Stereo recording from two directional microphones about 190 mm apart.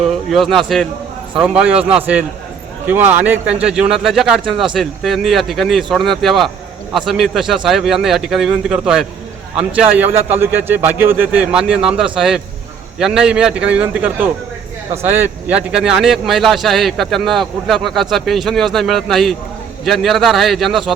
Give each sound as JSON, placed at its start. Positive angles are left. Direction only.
{"t": 0.3, "sound": "speech", "side_deg": 0}
{"t": 4.4, "sound": "speech", "side_deg": -25}
{"t": 4.7, "sound": "a man's voice", "side_deg": 0}